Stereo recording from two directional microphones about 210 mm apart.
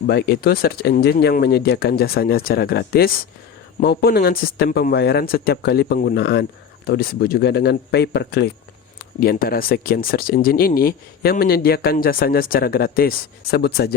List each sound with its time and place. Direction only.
0.1 s speech: 50° left (ahead or behind)